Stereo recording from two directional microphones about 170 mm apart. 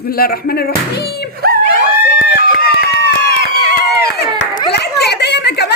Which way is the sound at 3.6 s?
75° left (ahead or behind).